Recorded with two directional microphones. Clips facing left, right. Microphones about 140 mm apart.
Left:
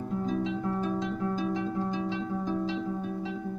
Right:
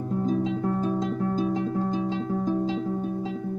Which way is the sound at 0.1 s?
35° right (ahead or behind).